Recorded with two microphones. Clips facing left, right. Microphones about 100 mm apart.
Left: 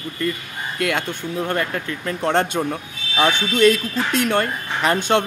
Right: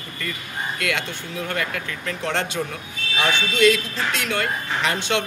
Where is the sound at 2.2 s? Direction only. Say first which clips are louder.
Left 6 dB; 45° left (ahead or behind).